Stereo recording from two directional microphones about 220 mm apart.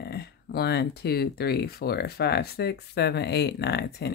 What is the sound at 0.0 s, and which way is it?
Speech, 45° left (ahead or behind).